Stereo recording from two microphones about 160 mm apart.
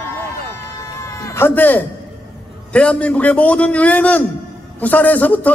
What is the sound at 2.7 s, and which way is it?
A man's voice, 5° left (ahead or behind).